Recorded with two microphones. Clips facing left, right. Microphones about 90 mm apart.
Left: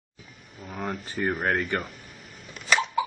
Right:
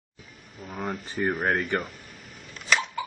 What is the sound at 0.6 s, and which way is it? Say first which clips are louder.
Speech: even; centre (ahead or behind).